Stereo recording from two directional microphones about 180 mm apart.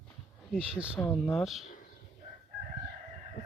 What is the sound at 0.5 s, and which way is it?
Speech, 5° right (ahead or behind).